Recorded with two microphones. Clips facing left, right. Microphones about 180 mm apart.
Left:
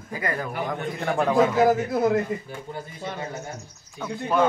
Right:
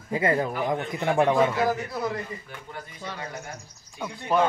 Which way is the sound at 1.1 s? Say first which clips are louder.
Right 2 dB; 15° right (ahead or behind).